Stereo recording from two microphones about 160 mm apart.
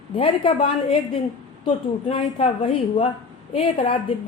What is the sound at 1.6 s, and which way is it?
A woman's voice, 35° left (ahead or behind).